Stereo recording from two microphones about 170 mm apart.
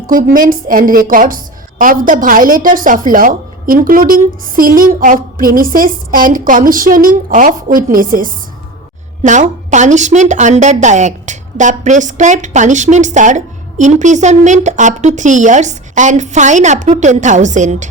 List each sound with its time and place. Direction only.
0.1 s a woman's voice: 55° right (ahead or behind)